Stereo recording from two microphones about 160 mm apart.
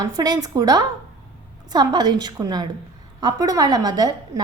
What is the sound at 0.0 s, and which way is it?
A woman's voice, 25° right (ahead or behind).